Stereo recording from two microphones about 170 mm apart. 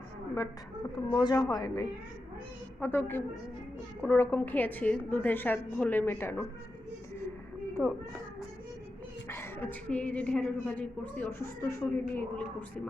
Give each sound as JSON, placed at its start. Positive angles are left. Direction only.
{"t": 1.1, "sound": "a woman's voice", "side_deg": 20}
{"t": 7.7, "sound": "speech", "side_deg": 15}
{"t": 9.2, "sound": "a woman's voice", "side_deg": 15}